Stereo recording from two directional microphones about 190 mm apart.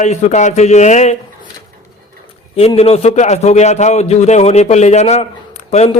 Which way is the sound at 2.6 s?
30° left (ahead or behind).